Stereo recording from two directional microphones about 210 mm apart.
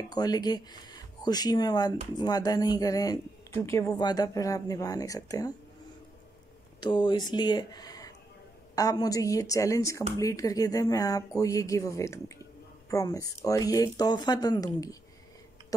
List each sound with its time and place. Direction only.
0.1 s speech: 20° left (ahead or behind)
6.8 s speech: 20° left (ahead or behind)